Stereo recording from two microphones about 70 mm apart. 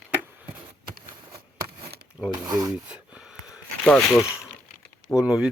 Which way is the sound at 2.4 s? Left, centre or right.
Right.